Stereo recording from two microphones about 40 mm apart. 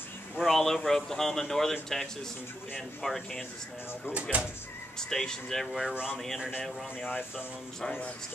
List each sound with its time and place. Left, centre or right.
0.4 s speech: centre
4.2 s speech: right
4.9 s speech: centre
5.7 s speech: centre
6.0 s speech: centre